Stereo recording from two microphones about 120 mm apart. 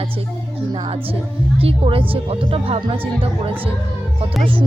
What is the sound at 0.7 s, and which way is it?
Speech, 45° right (ahead or behind).